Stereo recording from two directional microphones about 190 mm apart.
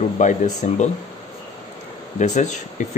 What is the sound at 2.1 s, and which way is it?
Speech, 40° left (ahead or behind).